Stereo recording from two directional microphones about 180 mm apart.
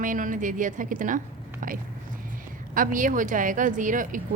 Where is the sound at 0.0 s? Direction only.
45° right (ahead or behind).